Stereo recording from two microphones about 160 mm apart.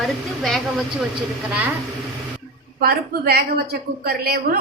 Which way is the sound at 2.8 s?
75° right (ahead or behind).